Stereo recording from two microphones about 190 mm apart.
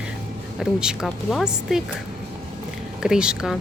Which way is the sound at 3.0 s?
5° right (ahead or behind).